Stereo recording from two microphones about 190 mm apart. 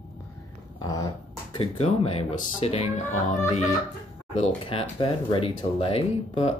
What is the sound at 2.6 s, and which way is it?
Speech, 30° left (ahead or behind).